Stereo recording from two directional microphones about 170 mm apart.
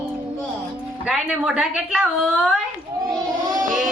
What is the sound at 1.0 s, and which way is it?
A woman's voice, 5° right (ahead or behind).